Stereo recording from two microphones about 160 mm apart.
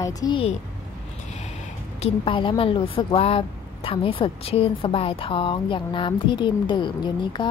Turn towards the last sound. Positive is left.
turn(degrees=30)  # may be behind; listen again after turning